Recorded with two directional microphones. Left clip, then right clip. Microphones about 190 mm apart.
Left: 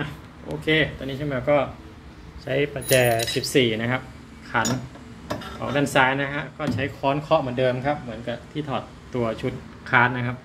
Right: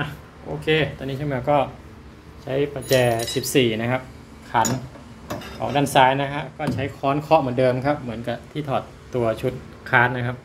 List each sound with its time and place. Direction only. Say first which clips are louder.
0.7 s speech: even; 10° right (ahead or behind)
8.1 s speech: right 2 dB; 20° right (ahead or behind)
8.6 s speech: right 8 dB; 10° right (ahead or behind)